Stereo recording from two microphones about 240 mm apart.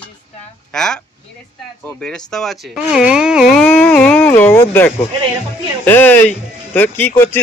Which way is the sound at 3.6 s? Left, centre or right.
Centre.